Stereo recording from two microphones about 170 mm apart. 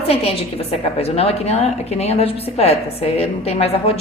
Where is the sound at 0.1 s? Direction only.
35° left (ahead or behind).